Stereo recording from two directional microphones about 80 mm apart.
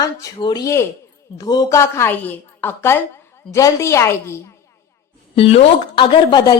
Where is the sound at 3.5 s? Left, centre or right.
Left.